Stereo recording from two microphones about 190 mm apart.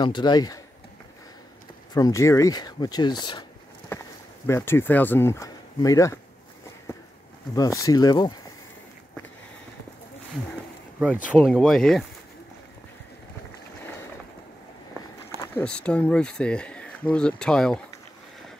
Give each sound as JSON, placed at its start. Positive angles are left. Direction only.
{"t": 0.0, "sound": "speech", "side_deg": 25}
{"t": 2.0, "sound": "speech", "side_deg": 20}
{"t": 4.5, "sound": "speech", "side_deg": 15}
{"t": 7.5, "sound": "speech", "side_deg": 20}
{"t": 11.4, "sound": "speech", "side_deg": 0}
{"t": 15.4, "sound": "speech", "side_deg": 10}